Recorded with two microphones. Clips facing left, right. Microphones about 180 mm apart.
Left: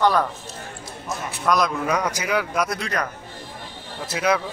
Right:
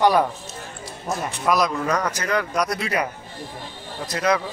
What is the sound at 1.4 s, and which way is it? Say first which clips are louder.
A man's voice: even; centre (ahead or behind).